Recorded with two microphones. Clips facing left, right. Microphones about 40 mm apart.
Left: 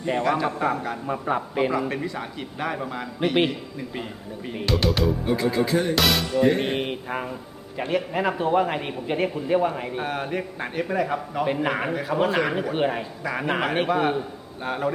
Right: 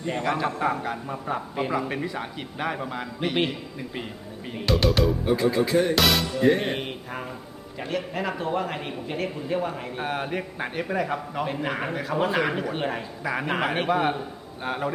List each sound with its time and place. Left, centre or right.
0.0 s a man's voice: centre
0.3 s music: centre
1.0 s a man's voice: centre
1.9 s music: centre
7.8 s a man's voice: centre
10.0 s music: centre
11.4 s music: centre
12.7 s a man's voice: centre
13.2 s music: centre